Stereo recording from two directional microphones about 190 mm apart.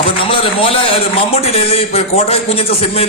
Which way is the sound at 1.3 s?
30° left (ahead or behind).